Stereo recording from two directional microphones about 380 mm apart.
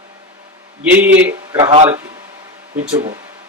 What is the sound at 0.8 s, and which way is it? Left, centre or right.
A man's voice, centre.